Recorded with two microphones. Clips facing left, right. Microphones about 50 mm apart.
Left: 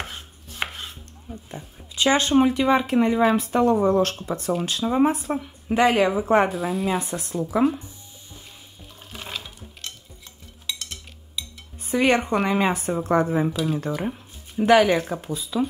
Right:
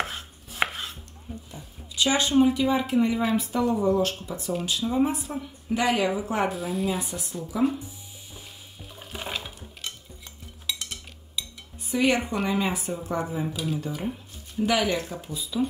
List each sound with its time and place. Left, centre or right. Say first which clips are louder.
0.0 s chopping: right 4 dB; centre
1.5 s speech: left 4 dB; left
6.5 s speech: left 4 dB; centre
7.2 s speech: left 7 dB; left
8.5 s stir: right 1 dB; centre
11.9 s speech: left 4 dB; left
14.6 s speech: left 8 dB; left